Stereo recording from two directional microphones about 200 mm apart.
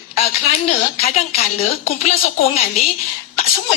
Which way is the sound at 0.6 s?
30° left (ahead or behind).